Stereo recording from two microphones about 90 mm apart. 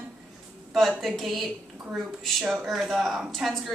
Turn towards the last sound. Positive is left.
turn(degrees=0)  # may be behind; listen again after turning